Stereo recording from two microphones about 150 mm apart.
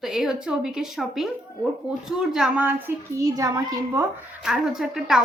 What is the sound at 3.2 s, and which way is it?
Speech, 25° right (ahead or behind).